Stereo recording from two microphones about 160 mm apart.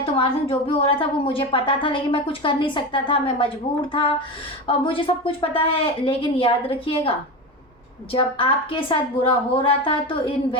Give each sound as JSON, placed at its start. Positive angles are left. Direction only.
{"t": 0.0, "sound": "a woman's voice", "side_deg": 35}
{"t": 8.1, "sound": "a woman's voice", "side_deg": 35}